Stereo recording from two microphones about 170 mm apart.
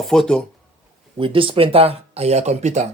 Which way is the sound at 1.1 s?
30° right (ahead or behind).